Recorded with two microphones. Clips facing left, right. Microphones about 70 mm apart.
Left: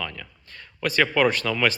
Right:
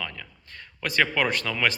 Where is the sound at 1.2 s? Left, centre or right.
Centre.